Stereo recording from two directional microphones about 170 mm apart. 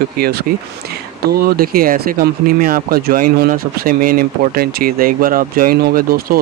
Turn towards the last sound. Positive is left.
turn(degrees=-60)  # may be behind; listen again after turning